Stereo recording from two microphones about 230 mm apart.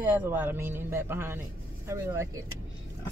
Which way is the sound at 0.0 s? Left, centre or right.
Centre.